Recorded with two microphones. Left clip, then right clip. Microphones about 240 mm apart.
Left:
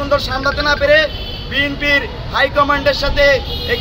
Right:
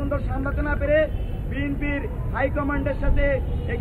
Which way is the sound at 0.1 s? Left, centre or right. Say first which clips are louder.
Left 13 dB; centre.